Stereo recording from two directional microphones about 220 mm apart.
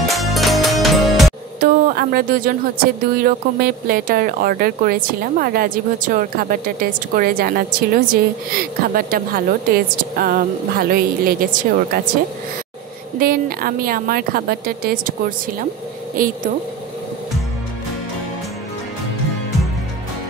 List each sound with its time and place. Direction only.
0.1 s music: centre (ahead or behind)
1.6 s speech: 40° right (ahead or behind)
13.2 s speech: 40° right (ahead or behind)
16.2 s speech: 40° right (ahead or behind)